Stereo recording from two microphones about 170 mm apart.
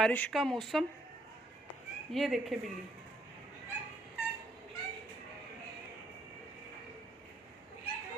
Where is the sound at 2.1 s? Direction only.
Centre (ahead or behind).